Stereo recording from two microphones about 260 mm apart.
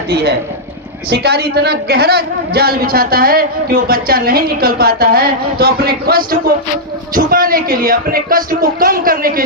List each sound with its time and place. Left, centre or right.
0.1 s a woman's voice: right